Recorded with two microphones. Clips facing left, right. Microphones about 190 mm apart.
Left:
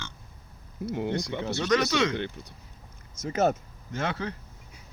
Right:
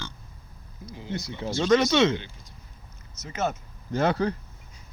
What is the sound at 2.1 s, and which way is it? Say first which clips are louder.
Speech: left 6 dB; 65° left (ahead or behind).